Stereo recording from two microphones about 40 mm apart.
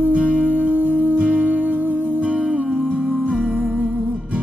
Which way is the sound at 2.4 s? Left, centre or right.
Right.